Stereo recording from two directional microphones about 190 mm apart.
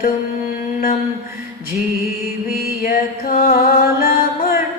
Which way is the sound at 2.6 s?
50° left (ahead or behind).